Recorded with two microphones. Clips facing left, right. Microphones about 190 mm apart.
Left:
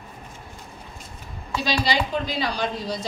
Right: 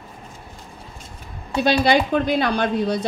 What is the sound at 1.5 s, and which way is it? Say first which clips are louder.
A woman's voice: right 7 dB; 60° right (ahead or behind).